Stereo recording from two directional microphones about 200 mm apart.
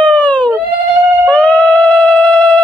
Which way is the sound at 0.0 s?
5° left (ahead or behind).